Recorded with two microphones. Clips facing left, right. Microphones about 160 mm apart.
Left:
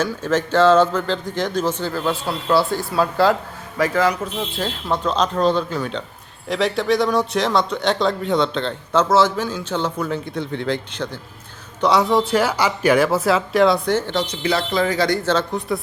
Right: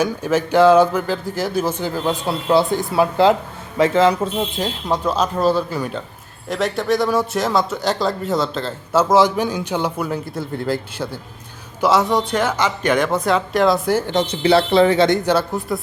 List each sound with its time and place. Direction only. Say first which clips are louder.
0.0 s speech: right 2 dB; 10° right (ahead or behind); by 4.4 s 25° right (ahead or behind)
4.5 s speech: right 2 dB; 15° right (ahead or behind)
14.1 s speech: right 5 dB; 25° right (ahead or behind); by 15.8 s 5° right (ahead or behind)